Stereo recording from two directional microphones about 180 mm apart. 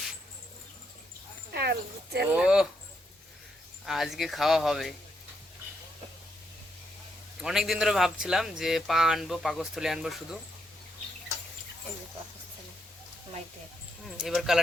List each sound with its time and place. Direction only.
1.5 s speech: 65° right (ahead or behind)
2.3 s speech: 5° right (ahead or behind)
3.8 s speech: centre (ahead or behind)
7.4 s speech: centre (ahead or behind)
14.2 s speech: centre (ahead or behind)